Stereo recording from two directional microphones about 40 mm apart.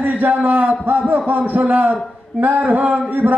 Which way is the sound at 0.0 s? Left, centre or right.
Right.